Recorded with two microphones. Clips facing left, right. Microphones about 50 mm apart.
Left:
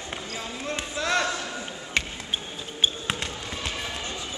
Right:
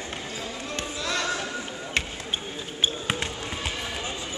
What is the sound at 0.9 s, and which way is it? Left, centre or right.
Basketball bounce, left.